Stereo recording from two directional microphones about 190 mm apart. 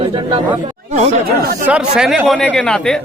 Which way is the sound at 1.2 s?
50° right (ahead or behind).